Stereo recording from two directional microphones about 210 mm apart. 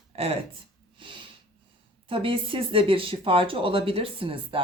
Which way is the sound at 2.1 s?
25° right (ahead or behind).